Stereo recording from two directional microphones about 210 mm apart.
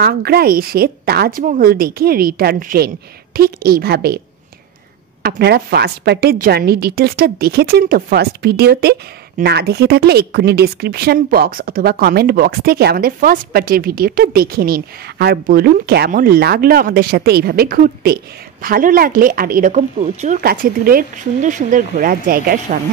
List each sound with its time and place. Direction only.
0.0 s a woman's voice: 50° right (ahead or behind)
5.2 s a woman's voice: 50° right (ahead or behind)